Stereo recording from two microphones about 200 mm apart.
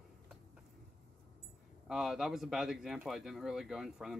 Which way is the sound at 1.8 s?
Centre (ahead or behind).